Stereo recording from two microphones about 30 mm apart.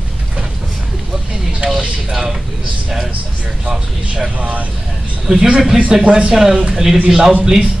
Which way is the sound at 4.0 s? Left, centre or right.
Right.